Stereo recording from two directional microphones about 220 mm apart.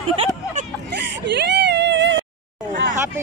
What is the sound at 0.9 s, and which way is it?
Whimper, 50° right (ahead or behind).